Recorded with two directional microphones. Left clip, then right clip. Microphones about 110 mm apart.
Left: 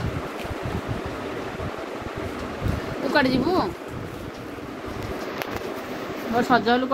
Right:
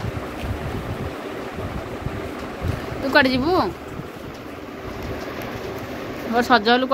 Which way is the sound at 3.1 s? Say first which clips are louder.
Right 4 dB; 10° right (ahead or behind).